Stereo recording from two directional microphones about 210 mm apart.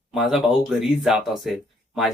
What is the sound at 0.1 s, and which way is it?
Speech, centre (ahead or behind).